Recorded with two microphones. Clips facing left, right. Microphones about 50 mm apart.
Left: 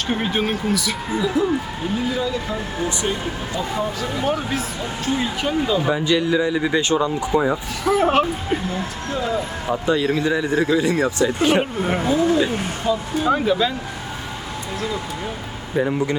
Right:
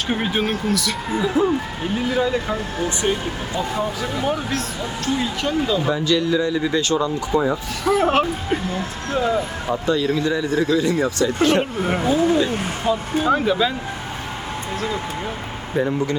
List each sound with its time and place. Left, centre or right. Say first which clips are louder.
0.1 s speech: even; centre
1.2 s speech: right 1 dB; right
4.2 s speech: left 1 dB; centre
9.0 s speech: right 4 dB; right
9.8 s speech: left 1 dB; left
12.0 s speech: right 1 dB; right
12.5 s speech: right 1 dB; right
13.2 s speech: even; centre
15.7 s speech: even; centre